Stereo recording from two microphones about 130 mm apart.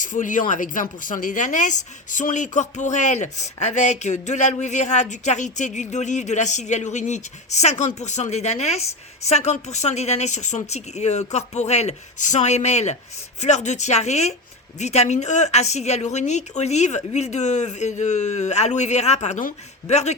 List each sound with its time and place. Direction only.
0.0 s speech: 85° left; by 20.1 s 60° left (ahead or behind)